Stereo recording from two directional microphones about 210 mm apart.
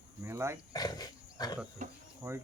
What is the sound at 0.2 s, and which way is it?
Speech, 10° right (ahead or behind).